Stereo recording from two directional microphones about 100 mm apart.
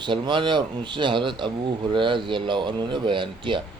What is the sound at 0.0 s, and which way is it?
Speech, 50° right (ahead or behind).